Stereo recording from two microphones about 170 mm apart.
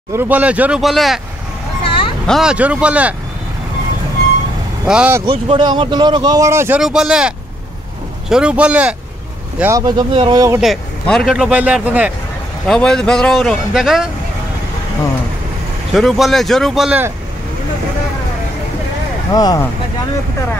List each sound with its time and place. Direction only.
0.1 s speech: 10° right (ahead or behind)
2.2 s speech: centre (ahead or behind)
4.8 s speech: 5° right (ahead or behind)
5.2 s speech: 30° right (ahead or behind)
6.8 s speech: 5° right (ahead or behind)
9.6 s speech: 20° right (ahead or behind)
10.6 s speech: centre (ahead or behind)
12.6 s speech: 5° left (ahead or behind)
15.9 s speech: centre (ahead or behind)
19.3 s speech: 20° left (ahead or behind)